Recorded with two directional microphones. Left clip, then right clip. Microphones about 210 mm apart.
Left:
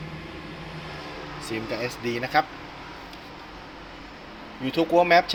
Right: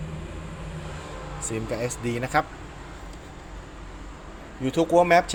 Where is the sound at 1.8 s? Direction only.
10° right (ahead or behind).